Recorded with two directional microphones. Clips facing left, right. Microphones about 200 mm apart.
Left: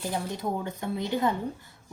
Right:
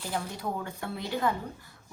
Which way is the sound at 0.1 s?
20° left (ahead or behind).